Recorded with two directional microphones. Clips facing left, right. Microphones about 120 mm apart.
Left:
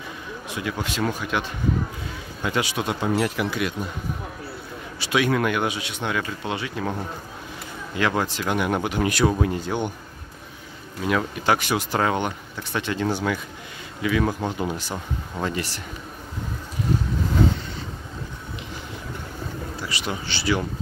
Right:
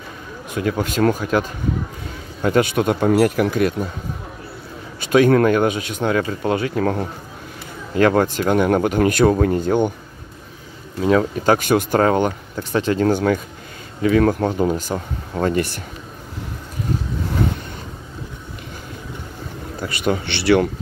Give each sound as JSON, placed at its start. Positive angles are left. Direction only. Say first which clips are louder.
{"t": 0.5, "sound": "speech", "louder": "right 8 dB", "side_deg": -45}
{"t": 5.0, "sound": "speech", "louder": "right 8 dB", "side_deg": -45}
{"t": 11.1, "sound": "speech", "louder": "right 6 dB", "side_deg": -40}
{"t": 19.8, "sound": "speech", "louder": "right 11 dB", "side_deg": -50}